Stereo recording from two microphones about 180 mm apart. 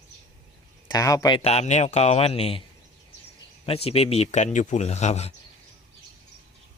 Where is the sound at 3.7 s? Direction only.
35° left (ahead or behind).